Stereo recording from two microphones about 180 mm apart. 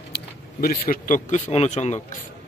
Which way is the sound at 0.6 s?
50° left (ahead or behind).